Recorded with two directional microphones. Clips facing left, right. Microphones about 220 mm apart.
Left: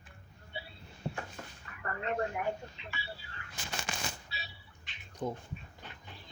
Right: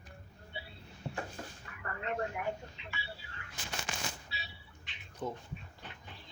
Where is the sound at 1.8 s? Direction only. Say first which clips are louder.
Left 3 dB; 40° left (ahead or behind).